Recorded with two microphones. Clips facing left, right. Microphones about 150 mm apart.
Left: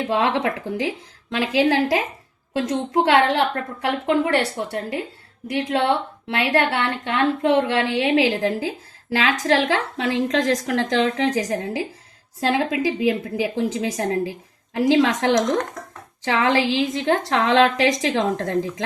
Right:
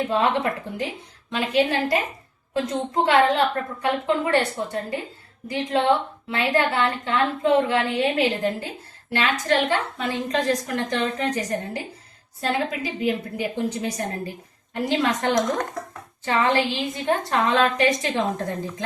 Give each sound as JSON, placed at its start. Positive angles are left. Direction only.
{"t": 0.1, "sound": "a woman's voice", "side_deg": 90}